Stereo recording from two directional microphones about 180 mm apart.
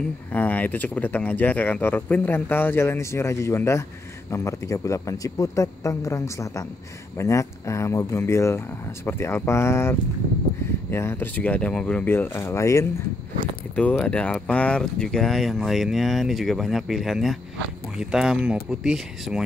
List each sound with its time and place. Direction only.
0.3 s speech: 10° left (ahead or behind)